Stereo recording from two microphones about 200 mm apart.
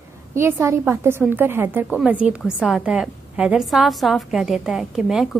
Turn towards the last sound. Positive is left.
turn(degrees=0)  # may be behind; listen again after turning